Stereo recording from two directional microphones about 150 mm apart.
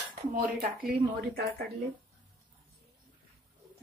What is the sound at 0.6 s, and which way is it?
A woman's voice, 85° right.